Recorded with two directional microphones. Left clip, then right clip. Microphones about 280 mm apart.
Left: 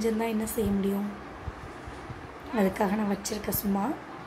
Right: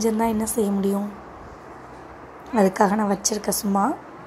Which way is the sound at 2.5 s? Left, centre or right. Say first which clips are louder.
Right 8 dB; centre.